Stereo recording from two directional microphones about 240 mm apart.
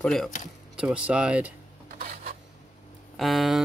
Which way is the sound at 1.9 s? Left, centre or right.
Right.